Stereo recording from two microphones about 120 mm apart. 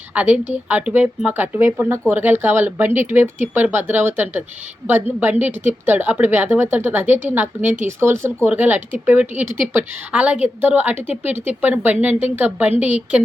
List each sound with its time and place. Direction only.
0.1 s a woman's voice: 10° right (ahead or behind)